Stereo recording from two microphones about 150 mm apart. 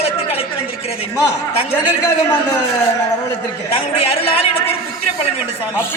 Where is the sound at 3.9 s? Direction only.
40° left (ahead or behind).